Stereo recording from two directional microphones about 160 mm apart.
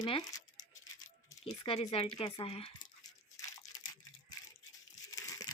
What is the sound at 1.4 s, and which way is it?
A woman's voice, 35° left (ahead or behind).